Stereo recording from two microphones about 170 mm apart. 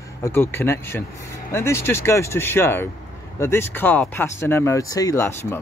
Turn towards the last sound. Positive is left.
turn(degrees=15)  # may be behind; listen again after turning